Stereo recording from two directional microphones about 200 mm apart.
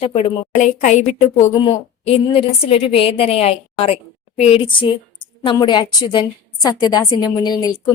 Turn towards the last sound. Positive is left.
turn(degrees=20)  # may be behind; listen again after turning